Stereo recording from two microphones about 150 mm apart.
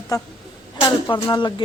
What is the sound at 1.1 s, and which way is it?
Speech, 30° left (ahead or behind).